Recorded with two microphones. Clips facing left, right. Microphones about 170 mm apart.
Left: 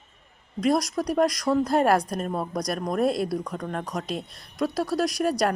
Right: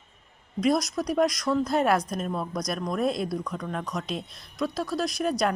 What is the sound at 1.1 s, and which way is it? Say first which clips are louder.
A woman's voice: left 2 dB; 35° left (ahead or behind).